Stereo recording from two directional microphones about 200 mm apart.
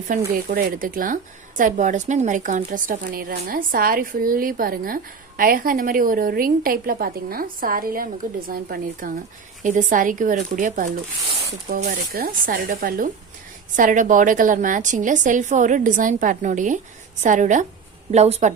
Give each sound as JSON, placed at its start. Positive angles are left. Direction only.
{"t": 0.1, "sound": "a woman's voice", "side_deg": -40}